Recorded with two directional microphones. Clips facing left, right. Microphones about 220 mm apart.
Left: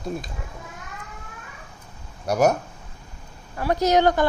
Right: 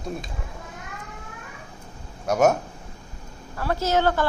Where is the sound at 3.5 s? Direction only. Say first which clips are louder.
Left 4 dB; 15° left (ahead or behind).